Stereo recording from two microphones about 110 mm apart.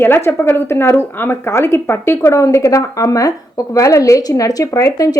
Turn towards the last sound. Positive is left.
turn(degrees=30)  # may be behind; listen again after turning